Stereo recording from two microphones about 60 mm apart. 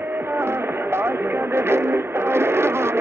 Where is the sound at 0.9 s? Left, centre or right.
Right.